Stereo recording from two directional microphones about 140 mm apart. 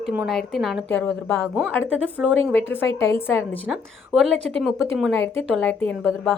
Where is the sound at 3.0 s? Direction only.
15° left (ahead or behind).